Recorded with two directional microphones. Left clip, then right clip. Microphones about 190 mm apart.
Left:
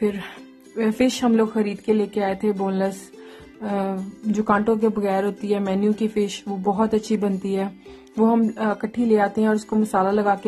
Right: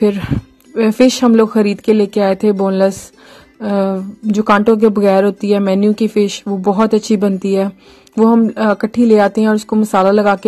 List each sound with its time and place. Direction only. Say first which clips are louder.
0.0 s speech: right 10 dB; 30° right (ahead or behind)